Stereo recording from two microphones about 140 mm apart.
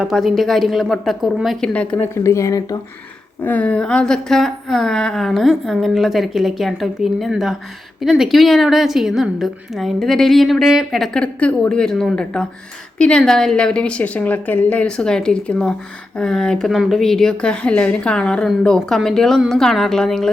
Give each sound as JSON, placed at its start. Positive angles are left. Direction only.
{"t": 0.0, "sound": "a woman's voice", "side_deg": 0}
{"t": 1.7, "sound": "a woman's voice", "side_deg": 10}
{"t": 2.2, "sound": "speech", "side_deg": 20}
{"t": 3.4, "sound": "a woman's voice", "side_deg": 10}